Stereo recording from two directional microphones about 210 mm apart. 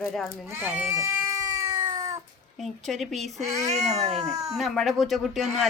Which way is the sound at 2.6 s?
Centre (ahead or behind).